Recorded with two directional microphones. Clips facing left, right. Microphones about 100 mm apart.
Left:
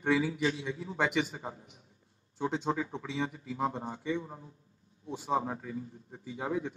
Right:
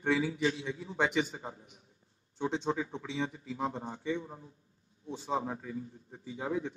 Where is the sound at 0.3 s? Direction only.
30° left (ahead or behind).